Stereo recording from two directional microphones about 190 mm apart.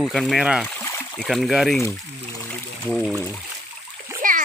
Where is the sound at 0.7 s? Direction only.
10° left (ahead or behind).